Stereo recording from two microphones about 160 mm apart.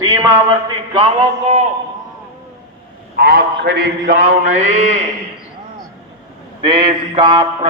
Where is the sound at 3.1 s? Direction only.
70° right (ahead or behind); by 5.0 s 45° right (ahead or behind).